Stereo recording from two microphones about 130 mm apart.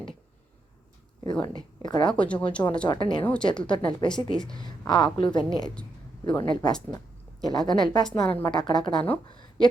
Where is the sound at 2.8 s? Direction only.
40° left (ahead or behind).